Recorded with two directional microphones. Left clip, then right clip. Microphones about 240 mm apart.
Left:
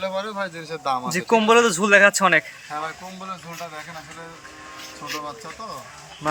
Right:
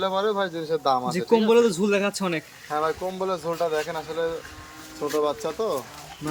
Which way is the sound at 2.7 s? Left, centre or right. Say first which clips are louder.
Right 5 dB; right.